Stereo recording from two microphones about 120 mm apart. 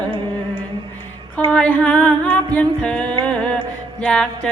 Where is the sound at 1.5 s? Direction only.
10° left (ahead or behind).